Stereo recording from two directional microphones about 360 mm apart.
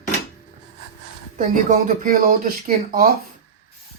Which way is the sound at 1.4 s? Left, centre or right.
Right.